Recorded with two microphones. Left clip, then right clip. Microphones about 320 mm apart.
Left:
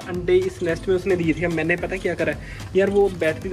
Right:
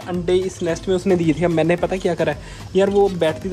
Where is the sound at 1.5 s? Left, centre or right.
Right.